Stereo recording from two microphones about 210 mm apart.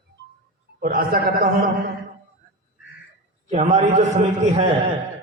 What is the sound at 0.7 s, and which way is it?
Speech, 45° right (ahead or behind).